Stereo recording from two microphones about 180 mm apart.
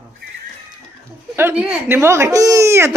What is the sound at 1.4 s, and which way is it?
Speech, 10° right (ahead or behind).